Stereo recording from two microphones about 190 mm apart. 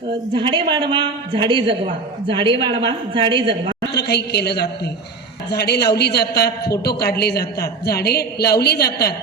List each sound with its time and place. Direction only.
0.3 s a woman's voice: 25° right (ahead or behind)
3.9 s a man's voice: 60° left (ahead or behind)